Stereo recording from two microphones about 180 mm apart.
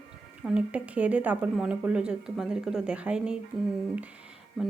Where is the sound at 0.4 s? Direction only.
5° right (ahead or behind).